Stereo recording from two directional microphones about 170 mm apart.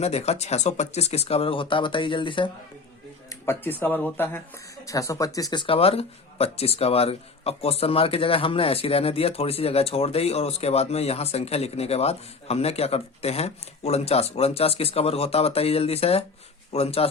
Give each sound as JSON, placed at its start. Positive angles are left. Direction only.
{"t": 0.0, "sound": "speech", "side_deg": 40}
{"t": 3.2, "sound": "speech", "side_deg": 15}